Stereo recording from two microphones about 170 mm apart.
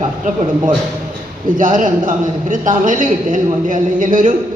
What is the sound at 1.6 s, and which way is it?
A man's voice, 50° right (ahead or behind).